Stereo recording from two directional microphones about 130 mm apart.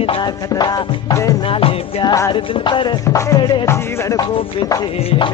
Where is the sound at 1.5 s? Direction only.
45° left (ahead or behind).